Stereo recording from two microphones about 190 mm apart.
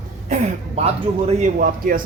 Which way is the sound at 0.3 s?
40° right (ahead or behind).